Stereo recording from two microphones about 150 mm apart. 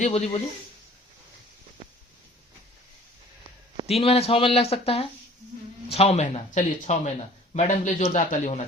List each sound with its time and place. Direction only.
0.0 s speech: 50° left (ahead or behind)
3.8 s speech: 40° left (ahead or behind)